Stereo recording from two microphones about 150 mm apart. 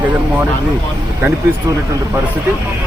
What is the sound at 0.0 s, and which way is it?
Vehicle, 10° right (ahead or behind).